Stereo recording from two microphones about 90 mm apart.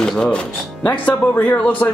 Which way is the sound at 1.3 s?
20° left (ahead or behind).